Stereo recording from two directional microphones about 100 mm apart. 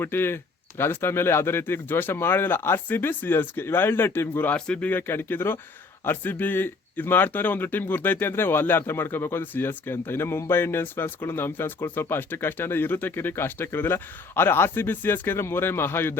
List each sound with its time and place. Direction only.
0.0 s speech: 20° left (ahead or behind)
4.5 s speech: 10° left (ahead or behind)